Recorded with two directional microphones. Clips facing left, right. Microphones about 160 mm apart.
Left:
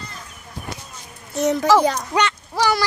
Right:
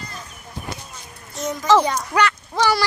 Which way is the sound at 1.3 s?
70° left (ahead or behind).